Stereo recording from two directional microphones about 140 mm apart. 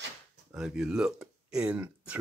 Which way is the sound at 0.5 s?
5° right (ahead or behind).